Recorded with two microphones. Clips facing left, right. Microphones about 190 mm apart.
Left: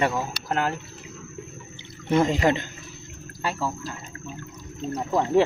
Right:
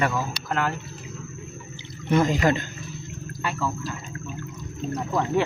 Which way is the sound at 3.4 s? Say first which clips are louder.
Even; 30° left (ahead or behind).